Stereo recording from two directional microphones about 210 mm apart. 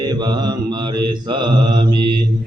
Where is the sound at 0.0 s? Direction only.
20° right (ahead or behind).